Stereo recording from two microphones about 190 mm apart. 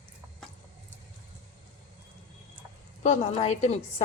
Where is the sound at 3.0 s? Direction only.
30° left (ahead or behind).